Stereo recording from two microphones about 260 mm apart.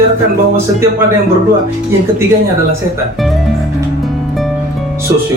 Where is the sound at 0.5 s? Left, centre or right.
Centre.